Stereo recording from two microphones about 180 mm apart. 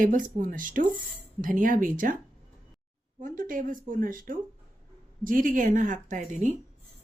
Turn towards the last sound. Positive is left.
turn(degrees=-45)  # may be behind; listen again after turning